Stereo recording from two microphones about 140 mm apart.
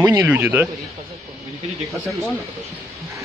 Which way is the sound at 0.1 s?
15° right (ahead or behind).